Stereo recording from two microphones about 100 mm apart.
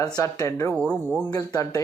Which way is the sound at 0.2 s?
30° left (ahead or behind).